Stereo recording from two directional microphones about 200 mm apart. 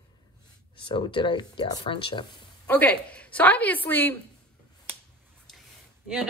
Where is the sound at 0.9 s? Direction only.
25° left (ahead or behind).